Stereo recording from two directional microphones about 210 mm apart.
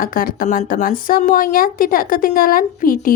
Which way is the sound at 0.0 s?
45° left (ahead or behind).